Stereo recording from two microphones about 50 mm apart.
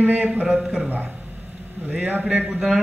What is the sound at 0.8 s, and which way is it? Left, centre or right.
Speech, right.